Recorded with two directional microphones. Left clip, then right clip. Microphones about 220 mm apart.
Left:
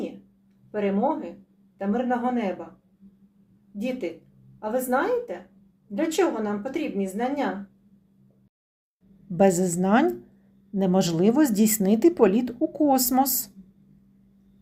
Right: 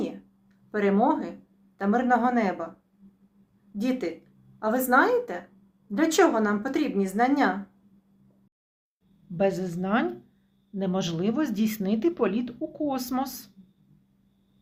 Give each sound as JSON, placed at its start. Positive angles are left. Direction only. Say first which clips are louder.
{"t": 0.7, "sound": "speech", "louder": "right 2 dB", "side_deg": -10}
{"t": 3.8, "sound": "speech", "louder": "right 1 dB", "side_deg": -10}
{"t": 9.4, "sound": "speech", "louder": "left 5 dB", "side_deg": 25}